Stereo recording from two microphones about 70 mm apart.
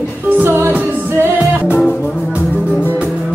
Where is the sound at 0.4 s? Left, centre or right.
Right.